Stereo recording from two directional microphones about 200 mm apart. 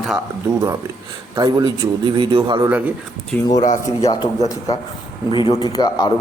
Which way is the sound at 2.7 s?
10° right (ahead or behind).